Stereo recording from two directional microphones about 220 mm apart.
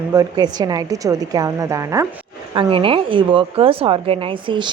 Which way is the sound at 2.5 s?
25° right (ahead or behind).